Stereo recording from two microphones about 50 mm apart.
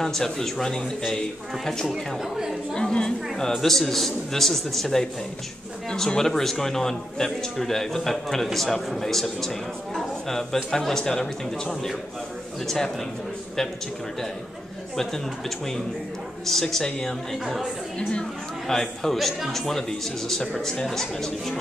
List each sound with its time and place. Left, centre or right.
0.0 s a man's voice: centre
2.2 s a woman's voice: centre
2.7 s a man's voice: centre
16.4 s a man's voice: centre
18.7 s a man's voice: centre